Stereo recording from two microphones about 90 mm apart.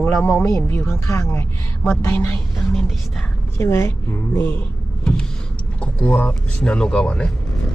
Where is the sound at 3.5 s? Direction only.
30° left (ahead or behind).